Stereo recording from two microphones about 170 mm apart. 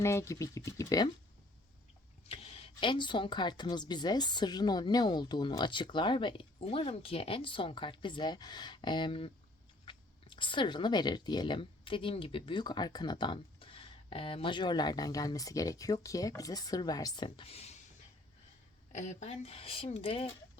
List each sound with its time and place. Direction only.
0.0 s speech: 15° left (ahead or behind)
2.3 s speech: 35° left (ahead or behind)
18.9 s speech: 45° left (ahead or behind)